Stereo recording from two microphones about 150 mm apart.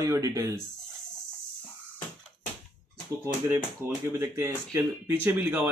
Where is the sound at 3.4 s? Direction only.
20° right (ahead or behind).